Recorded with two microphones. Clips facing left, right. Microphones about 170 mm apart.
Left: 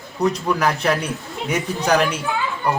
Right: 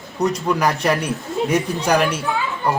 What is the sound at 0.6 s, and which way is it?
Speech, 15° right (ahead or behind).